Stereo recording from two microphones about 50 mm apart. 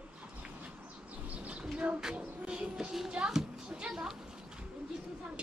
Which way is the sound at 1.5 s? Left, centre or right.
Right.